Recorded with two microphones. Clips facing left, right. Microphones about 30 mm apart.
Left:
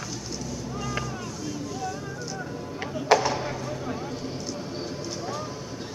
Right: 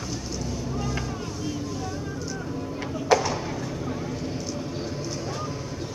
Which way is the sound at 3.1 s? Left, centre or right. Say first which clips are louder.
Left 1 dB; centre.